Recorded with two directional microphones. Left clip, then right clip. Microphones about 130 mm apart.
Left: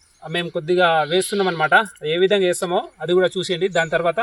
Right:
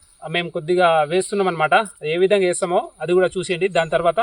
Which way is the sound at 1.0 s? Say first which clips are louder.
Even; 5° right (ahead or behind).